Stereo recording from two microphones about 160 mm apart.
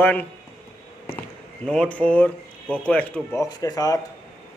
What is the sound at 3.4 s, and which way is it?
Speech, 25° left (ahead or behind).